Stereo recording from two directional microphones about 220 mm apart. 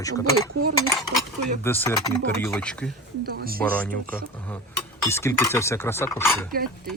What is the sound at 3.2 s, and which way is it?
Speech, 40° right (ahead or behind).